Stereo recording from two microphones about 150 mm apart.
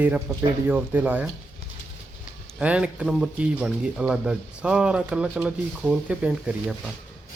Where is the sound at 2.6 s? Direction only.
10° right (ahead or behind).